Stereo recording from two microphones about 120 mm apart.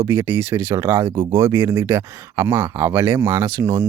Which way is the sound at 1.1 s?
30° right (ahead or behind).